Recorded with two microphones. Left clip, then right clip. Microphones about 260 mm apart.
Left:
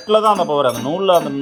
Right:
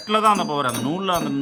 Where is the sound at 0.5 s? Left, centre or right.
Right.